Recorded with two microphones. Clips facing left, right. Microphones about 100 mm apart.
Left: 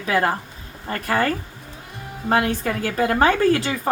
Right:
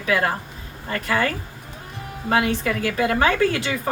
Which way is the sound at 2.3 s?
40° left (ahead or behind).